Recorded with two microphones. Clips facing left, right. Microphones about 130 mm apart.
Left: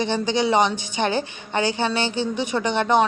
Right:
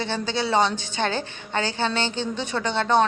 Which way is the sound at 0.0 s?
15° left (ahead or behind).